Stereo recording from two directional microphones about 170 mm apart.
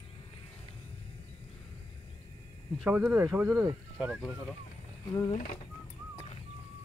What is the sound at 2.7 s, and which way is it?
Speech, 10° right (ahead or behind).